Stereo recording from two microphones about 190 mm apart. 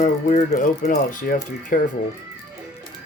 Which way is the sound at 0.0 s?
40° left (ahead or behind).